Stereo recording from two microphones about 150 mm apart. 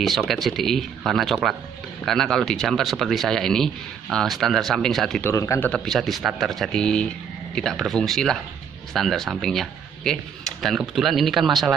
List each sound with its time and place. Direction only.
0.0 s speech: centre (ahead or behind)
5.2 s a man's voice: 20° left (ahead or behind)
5.7 s speech: centre (ahead or behind)